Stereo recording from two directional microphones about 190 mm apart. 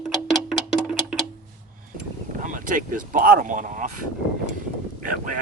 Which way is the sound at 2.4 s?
45° right (ahead or behind).